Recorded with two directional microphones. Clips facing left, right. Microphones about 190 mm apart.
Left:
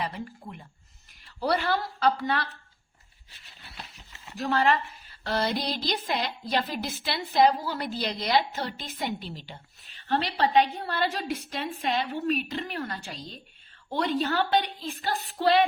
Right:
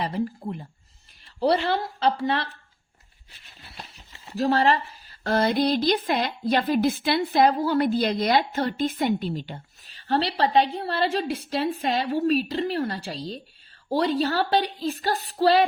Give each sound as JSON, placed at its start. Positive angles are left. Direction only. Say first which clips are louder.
{"t": 0.0, "sound": "a woman's voice", "louder": "right 7 dB", "side_deg": -35}
{"t": 4.4, "sound": "speech", "louder": "right 4 dB", "side_deg": -30}
{"t": 5.2, "sound": "speech", "louder": "right 7 dB", "side_deg": -50}
{"t": 9.9, "sound": "a woman's voice", "louder": "right 4 dB", "side_deg": -35}